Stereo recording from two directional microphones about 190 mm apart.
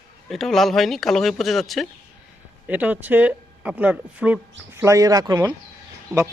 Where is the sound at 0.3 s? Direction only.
Centre (ahead or behind).